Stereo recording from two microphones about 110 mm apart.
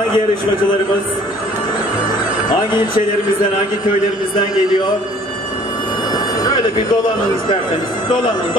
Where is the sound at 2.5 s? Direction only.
45° left (ahead or behind).